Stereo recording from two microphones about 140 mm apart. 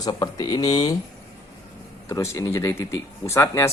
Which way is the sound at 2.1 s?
20° left (ahead or behind).